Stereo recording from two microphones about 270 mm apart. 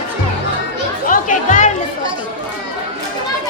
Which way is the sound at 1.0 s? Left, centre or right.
Left.